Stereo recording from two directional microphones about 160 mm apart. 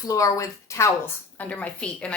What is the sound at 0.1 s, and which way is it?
Speech, 20° left (ahead or behind).